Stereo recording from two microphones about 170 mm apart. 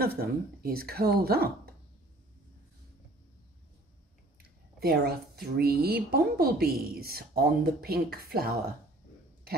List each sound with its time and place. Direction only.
0.0 s speech: 65° right (ahead or behind)
4.7 s speech: 65° right (ahead or behind)